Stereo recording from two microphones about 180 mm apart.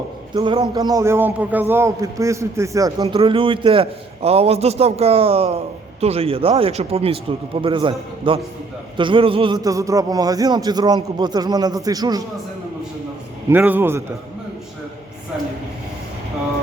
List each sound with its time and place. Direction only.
0.3 s a man's voice: 30° right (ahead or behind)
3.2 s a man's voice: 30° right (ahead or behind)
13.5 s a man's voice: 10° right (ahead or behind)